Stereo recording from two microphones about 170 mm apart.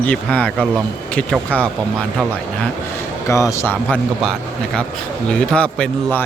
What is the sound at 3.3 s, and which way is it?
A man's voice, 15° left (ahead or behind).